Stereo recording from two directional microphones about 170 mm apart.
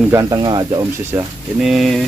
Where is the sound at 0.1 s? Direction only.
20° right (ahead or behind).